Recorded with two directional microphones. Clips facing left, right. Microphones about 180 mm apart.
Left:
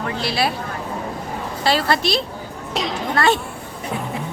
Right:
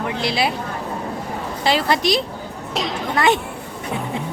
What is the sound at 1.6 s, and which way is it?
Speech, 15° right (ahead or behind).